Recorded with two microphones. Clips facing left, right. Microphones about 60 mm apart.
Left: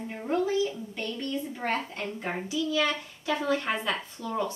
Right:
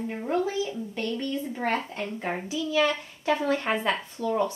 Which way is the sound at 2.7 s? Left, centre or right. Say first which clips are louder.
Right 6 dB; right.